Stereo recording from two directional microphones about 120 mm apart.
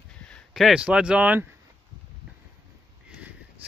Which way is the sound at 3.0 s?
10° right (ahead or behind).